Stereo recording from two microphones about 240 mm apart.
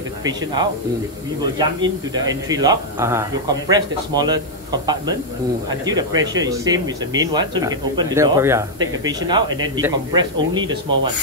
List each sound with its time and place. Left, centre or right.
1.6 s speech: centre
5.7 s speech: centre